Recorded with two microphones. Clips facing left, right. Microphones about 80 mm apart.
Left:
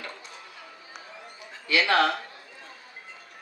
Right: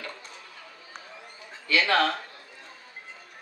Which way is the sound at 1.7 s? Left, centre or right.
Centre.